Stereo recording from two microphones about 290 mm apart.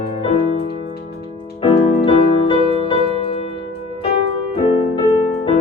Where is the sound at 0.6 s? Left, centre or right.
Left.